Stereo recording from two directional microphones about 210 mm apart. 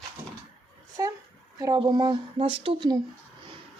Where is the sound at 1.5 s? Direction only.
15° right (ahead or behind).